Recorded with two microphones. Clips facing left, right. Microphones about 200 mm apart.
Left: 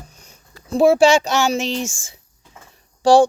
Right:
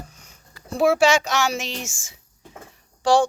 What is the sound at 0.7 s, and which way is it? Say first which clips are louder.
Speech: left 5 dB; 30° left (ahead or behind).